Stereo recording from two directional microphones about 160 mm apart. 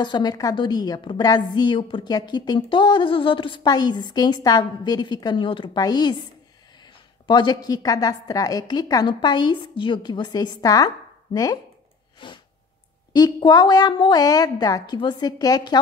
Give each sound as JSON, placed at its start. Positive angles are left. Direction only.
{"t": 0.0, "sound": "a woman's voice", "side_deg": 30}
{"t": 7.2, "sound": "a woman's voice", "side_deg": 25}
{"t": 12.2, "sound": "sneeze", "side_deg": 30}
{"t": 13.1, "sound": "a woman's voice", "side_deg": 25}